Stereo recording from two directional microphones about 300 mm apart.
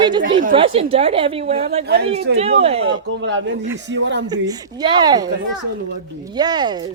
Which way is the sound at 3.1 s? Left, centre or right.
Right.